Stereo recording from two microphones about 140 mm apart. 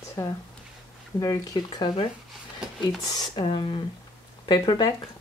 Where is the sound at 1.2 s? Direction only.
25° left (ahead or behind).